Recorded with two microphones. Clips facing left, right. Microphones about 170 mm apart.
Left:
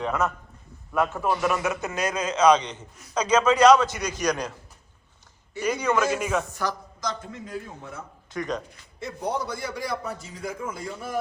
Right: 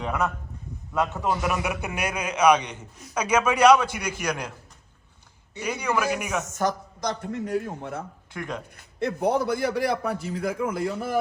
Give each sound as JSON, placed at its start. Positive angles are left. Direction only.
{"t": 0.0, "sound": "a man's voice", "side_deg": -15}
{"t": 5.5, "sound": "a man's voice", "side_deg": -15}
{"t": 6.6, "sound": "a man's voice", "side_deg": -55}